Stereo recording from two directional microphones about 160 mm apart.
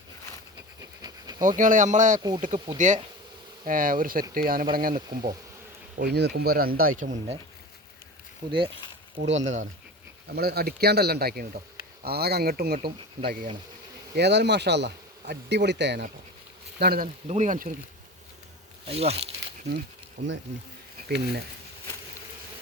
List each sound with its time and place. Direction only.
1.4 s speech: 55° right (ahead or behind)
6.0 s speech: 90° right; by 7.3 s 50° right (ahead or behind)
8.4 s speech: 30° right (ahead or behind)
9.3 s speech: 50° right (ahead or behind)
10.3 s speech: 80° right
14.2 s speech: 90° right
16.8 s speech: 70° right (ahead or behind)
17.2 s speech: 45° right (ahead or behind)
18.9 s speech: 40° right (ahead or behind)
20.2 s speech: 90° right